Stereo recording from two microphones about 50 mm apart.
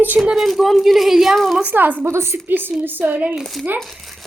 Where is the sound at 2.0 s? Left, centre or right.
Right.